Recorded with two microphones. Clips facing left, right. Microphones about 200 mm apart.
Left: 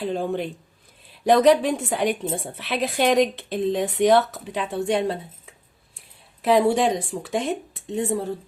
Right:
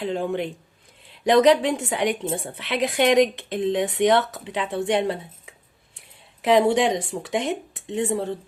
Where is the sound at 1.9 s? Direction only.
65° right (ahead or behind).